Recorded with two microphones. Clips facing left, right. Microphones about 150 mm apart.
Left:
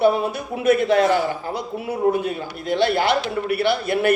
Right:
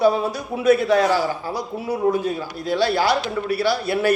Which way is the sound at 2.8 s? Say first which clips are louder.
Left 1 dB; 55° left (ahead or behind).